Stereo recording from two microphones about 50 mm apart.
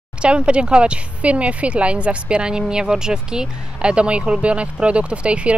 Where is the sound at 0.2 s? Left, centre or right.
Right.